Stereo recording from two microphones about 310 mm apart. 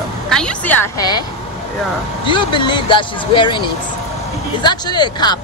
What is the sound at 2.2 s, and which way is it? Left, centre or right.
Speech, centre.